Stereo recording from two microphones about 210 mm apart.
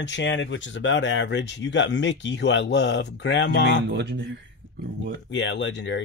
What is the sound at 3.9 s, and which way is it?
Speech, 55° right (ahead or behind).